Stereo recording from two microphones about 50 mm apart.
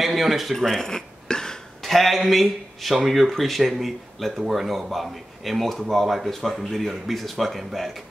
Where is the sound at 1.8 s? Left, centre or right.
Centre.